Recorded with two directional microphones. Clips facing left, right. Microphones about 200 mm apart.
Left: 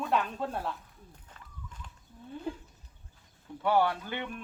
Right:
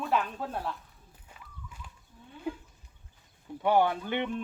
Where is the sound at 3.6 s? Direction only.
20° right (ahead or behind).